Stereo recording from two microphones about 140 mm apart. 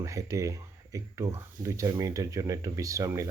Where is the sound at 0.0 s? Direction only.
20° right (ahead or behind).